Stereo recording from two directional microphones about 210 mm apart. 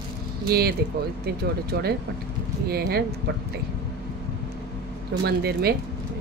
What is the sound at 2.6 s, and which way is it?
Speech, 50° right (ahead or behind).